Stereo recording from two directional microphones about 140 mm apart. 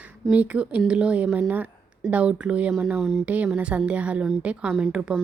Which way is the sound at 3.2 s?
10° right (ahead or behind).